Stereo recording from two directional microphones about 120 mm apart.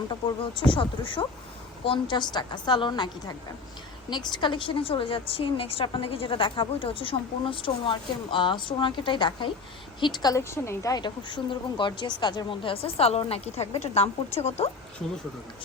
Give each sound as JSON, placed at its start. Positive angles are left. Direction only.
{"t": 0.5, "sound": "a woman's voice", "side_deg": 45}
{"t": 10.5, "sound": "a woman's voice", "side_deg": 25}
{"t": 11.0, "sound": "a woman's voice", "side_deg": 40}